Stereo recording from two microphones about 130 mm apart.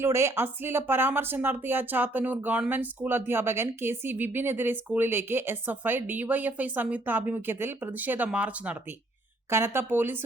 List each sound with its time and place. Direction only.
0.0 s speech: 20° right (ahead or behind)